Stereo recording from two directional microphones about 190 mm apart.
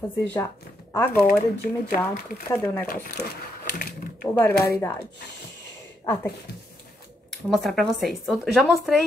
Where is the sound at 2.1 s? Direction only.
50° left (ahead or behind).